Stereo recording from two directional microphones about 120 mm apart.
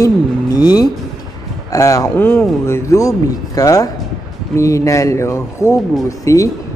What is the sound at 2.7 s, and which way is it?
Speech, 25° left (ahead or behind).